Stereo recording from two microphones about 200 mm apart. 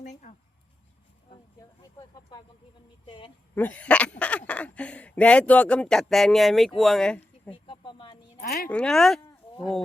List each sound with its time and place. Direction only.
0.0 s speech: 35° left (ahead or behind)
3.1 s a woman's voice: 25° left (ahead or behind)
3.5 s speech: 10° left (ahead or behind)
7.5 s a sound: 25° left (ahead or behind)
8.4 s a woman's voice: 50° left (ahead or behind)
8.7 s speech: 5° left (ahead or behind)